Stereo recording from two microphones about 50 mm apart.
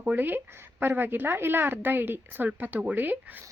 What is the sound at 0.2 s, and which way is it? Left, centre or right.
A woman's voice, right.